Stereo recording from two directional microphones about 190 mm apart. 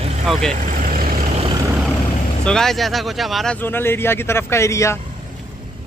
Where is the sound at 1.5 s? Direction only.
15° right (ahead or behind).